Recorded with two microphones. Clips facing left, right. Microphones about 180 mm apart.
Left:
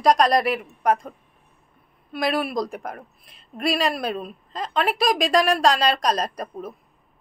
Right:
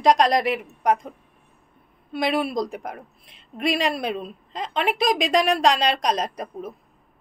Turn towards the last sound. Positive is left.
turn(degrees=-20)  # may be behind; listen again after turning